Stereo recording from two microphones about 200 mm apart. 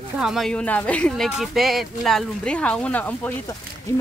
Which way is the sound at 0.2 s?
Centre (ahead or behind).